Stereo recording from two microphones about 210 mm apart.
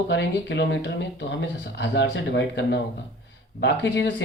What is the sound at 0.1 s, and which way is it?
Speech, 55° left (ahead or behind).